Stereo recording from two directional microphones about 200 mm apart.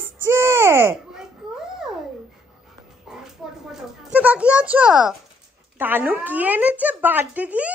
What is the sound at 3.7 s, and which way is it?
A child's voice, 5° right (ahead or behind).